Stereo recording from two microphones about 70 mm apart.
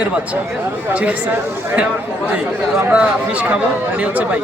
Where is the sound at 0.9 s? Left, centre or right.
Right.